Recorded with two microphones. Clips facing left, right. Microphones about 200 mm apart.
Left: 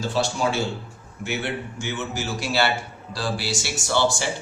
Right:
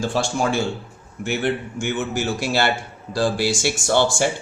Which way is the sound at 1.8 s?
50° right (ahead or behind).